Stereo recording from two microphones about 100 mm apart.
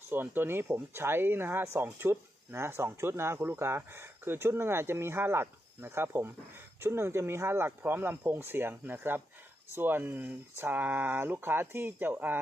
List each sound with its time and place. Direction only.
0.1 s speech: 20° right (ahead or behind)